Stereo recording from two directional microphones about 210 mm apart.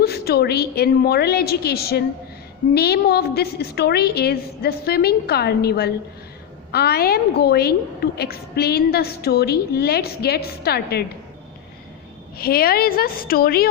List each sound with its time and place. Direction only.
0.0 s a woman's voice: 50° left (ahead or behind)
12.4 s a woman's voice: 45° left (ahead or behind)